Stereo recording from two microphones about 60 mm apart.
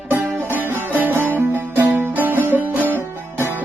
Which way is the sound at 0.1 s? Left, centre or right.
Right.